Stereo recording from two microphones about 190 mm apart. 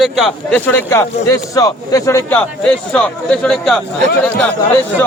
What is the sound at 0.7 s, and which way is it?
Speech, 10° left (ahead or behind).